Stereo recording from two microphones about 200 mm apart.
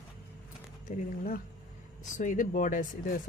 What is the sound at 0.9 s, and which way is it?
Speech, 40° left (ahead or behind).